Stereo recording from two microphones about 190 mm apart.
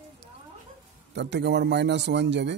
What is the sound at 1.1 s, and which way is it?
Speech, 65° right (ahead or behind).